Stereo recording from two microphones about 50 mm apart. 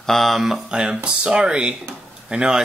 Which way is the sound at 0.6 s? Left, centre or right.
Centre.